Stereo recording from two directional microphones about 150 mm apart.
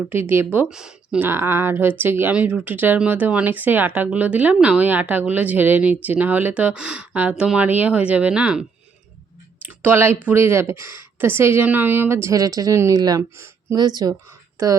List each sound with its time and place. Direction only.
0.0 s speech: 15° right (ahead or behind)
9.6 s speech: 15° right (ahead or behind)